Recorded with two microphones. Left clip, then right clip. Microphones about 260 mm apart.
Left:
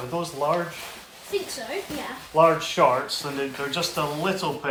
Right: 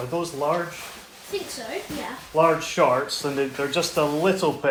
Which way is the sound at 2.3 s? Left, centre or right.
Left.